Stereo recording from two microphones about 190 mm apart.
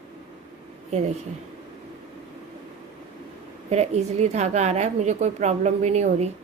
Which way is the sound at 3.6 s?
35° right (ahead or behind).